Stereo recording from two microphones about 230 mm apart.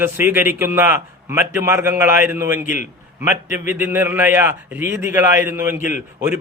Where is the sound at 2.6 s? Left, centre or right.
Left.